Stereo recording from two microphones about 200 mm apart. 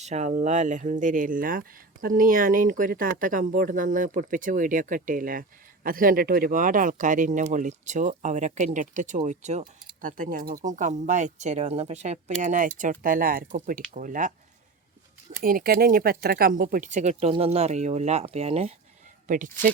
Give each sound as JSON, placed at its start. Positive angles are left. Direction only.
{"t": 0.0, "sound": "speech", "side_deg": -35}
{"t": 15.4, "sound": "speech", "side_deg": -50}